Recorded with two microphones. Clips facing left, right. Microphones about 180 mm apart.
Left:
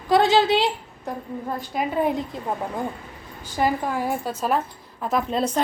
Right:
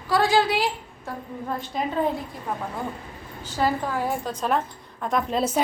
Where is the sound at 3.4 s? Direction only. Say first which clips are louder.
Left 1 dB; 15° left (ahead or behind).